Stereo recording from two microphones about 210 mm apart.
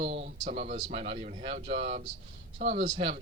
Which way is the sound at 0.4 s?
35° right (ahead or behind).